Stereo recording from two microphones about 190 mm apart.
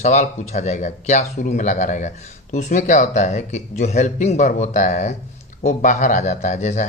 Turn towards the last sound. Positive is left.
turn(degrees=40)  # may be behind; listen again after turning